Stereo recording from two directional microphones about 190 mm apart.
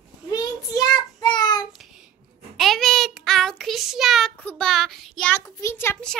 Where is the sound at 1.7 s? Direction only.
Centre (ahead or behind).